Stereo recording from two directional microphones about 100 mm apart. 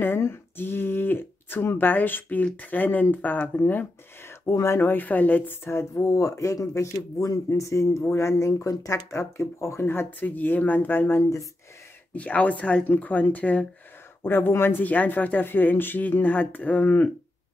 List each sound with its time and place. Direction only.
0.0 s speech: 25° left (ahead or behind)
12.1 s speech: 15° left (ahead or behind)